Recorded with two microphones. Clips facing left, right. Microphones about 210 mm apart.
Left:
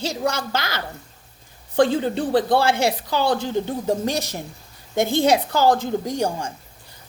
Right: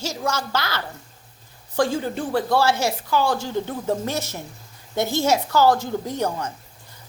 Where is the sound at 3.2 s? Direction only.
65° left (ahead or behind).